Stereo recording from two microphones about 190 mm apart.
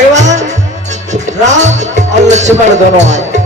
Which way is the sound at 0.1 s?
40° right (ahead or behind).